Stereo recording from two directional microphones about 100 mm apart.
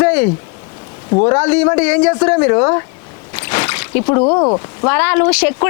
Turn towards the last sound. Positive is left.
turn(degrees=20)  # may be behind; listen again after turning